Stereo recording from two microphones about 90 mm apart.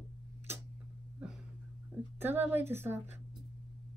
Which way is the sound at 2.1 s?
25° right (ahead or behind).